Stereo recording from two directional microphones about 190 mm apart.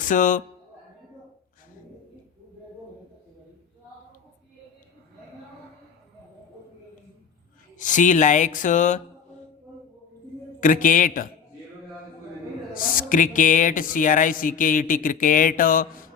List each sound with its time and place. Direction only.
0.0 s a man's voice: 45° left (ahead or behind)
7.8 s speech: 40° left (ahead or behind)
10.6 s speech: 45° left (ahead or behind)
12.7 s speech: 45° left (ahead or behind)